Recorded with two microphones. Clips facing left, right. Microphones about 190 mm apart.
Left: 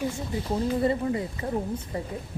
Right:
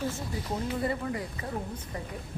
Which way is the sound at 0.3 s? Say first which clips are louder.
Left 9 dB; 25° left (ahead or behind).